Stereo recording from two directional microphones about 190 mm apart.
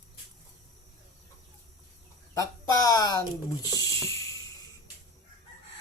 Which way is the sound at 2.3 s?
20° left (ahead or behind).